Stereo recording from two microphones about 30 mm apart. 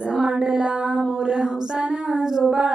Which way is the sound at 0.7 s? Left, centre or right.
Right.